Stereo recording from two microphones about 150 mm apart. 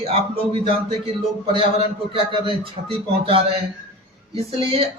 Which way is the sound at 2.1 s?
35° right (ahead or behind).